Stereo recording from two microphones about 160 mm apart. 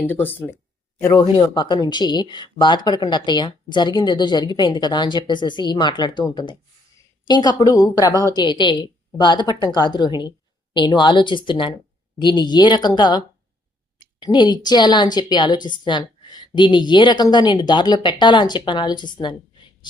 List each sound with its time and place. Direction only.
0.1 s speech: 10° left (ahead or behind)
1.4 s speech: 30° left (ahead or behind)